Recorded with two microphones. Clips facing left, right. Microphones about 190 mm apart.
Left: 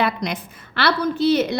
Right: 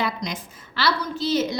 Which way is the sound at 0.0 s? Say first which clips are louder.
Left 5 dB; 60° left (ahead or behind).